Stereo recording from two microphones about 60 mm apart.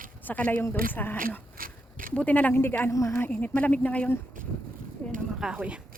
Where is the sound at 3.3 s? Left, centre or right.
Left.